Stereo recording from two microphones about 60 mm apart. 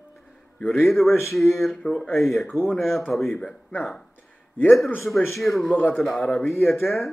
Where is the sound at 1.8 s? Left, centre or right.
Left.